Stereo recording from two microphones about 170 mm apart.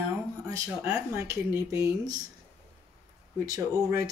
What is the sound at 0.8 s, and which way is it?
Speech, 15° right (ahead or behind).